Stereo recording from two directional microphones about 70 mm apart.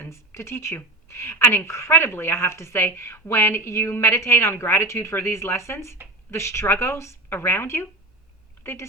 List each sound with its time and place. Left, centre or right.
0.1 s a woman's voice: left